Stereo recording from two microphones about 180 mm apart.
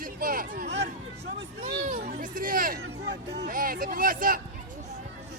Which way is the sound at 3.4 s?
50° right (ahead or behind).